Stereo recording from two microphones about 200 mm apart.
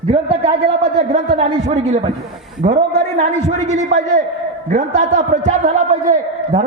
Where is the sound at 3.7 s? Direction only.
35° right (ahead or behind).